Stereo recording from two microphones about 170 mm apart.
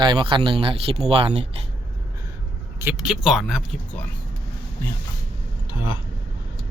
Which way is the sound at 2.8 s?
5° right (ahead or behind).